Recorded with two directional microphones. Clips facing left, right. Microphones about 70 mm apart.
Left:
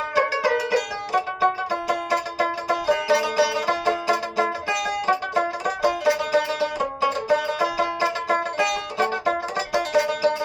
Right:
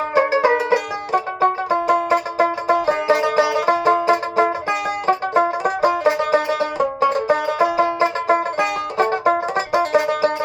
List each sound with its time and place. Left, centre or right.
0.1 s music: right